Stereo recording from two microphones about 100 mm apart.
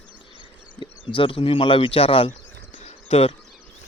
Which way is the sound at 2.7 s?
75° left (ahead or behind).